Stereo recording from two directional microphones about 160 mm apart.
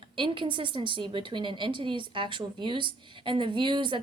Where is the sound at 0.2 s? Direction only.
30° right (ahead or behind).